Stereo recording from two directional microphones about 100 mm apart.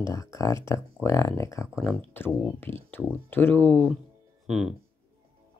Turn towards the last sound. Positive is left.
turn(degrees=-5)  # may be behind; listen again after turning